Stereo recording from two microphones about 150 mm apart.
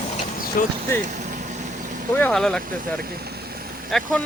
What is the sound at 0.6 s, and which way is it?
Vehicle, 70° left (ahead or behind).